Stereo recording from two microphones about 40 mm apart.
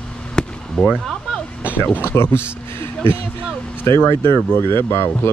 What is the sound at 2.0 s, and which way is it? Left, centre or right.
Speech, left.